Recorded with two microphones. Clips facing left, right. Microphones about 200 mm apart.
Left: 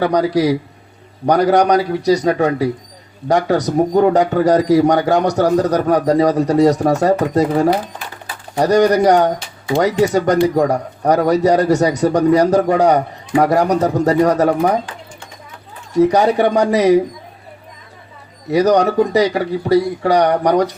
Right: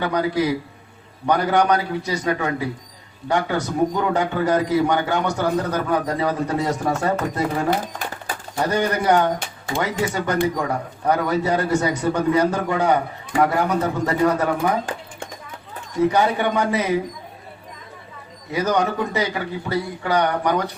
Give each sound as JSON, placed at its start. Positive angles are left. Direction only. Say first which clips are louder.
{"t": 0.0, "sound": "a man's voice", "louder": "left 6 dB", "side_deg": 35}
{"t": 16.0, "sound": "a man's voice", "louder": "left 6 dB", "side_deg": 40}
{"t": 18.5, "sound": "a man's voice", "louder": "left 8 dB", "side_deg": 40}